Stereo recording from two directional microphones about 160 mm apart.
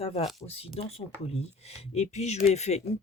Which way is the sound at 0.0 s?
35° left (ahead or behind).